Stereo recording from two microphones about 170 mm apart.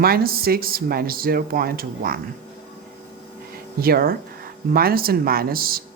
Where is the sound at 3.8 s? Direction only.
60° right (ahead or behind).